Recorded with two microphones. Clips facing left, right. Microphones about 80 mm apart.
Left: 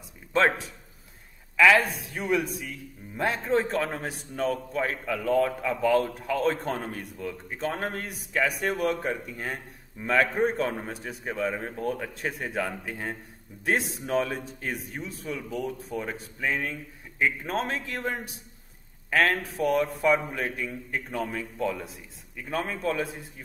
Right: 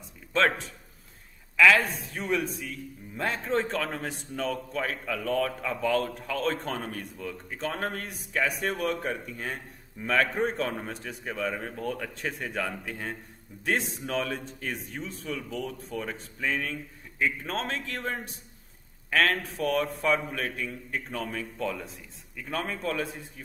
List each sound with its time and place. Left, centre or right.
0.3 s speech: centre
1.6 s speech: centre
2.2 s a man's voice: centre
6.9 s speech: centre
7.5 s a man's voice: centre
12.5 s a man's voice: left
13.7 s speech: centre
15.9 s a man's voice: left
17.4 s speech: centre
21.6 s a man's voice: centre